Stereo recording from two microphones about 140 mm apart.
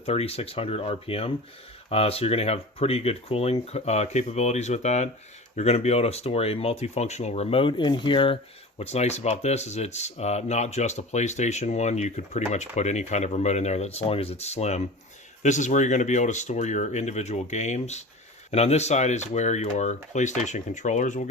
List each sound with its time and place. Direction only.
0.0 s speech: 45° left (ahead or behind)
8.8 s speech: 50° left (ahead or behind)